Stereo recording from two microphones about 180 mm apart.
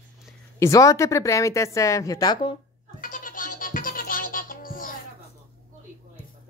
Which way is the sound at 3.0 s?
50° left (ahead or behind).